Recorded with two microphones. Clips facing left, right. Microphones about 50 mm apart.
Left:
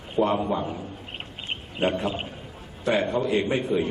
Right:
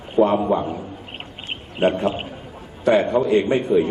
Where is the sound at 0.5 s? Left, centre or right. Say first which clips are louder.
Right 6 dB; centre.